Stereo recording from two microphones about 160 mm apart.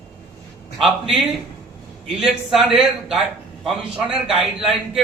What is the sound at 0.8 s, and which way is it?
A man's voice, centre (ahead or behind).